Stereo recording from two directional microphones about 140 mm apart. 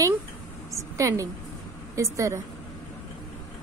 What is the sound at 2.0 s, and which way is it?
Speech, 20° right (ahead or behind).